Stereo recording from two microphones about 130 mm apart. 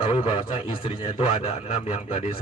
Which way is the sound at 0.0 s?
45° left (ahead or behind).